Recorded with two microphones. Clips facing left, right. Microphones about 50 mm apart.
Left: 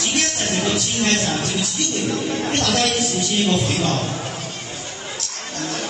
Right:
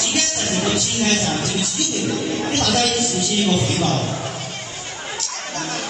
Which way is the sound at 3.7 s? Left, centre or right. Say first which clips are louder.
Right 1 dB; centre.